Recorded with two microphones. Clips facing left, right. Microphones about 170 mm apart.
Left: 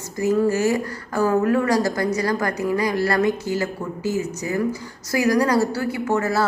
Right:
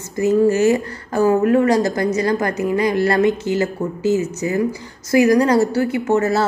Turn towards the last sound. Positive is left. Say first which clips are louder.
# right 4 dB
turn(degrees=-25)  # may be behind; listen again after turning